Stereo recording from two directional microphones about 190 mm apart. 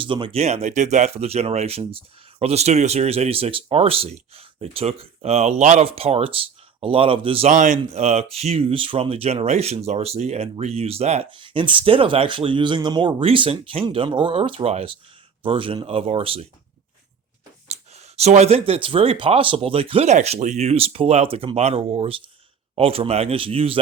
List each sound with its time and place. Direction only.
0.0 s speech: 25° right (ahead or behind)
17.7 s speech: 35° right (ahead or behind)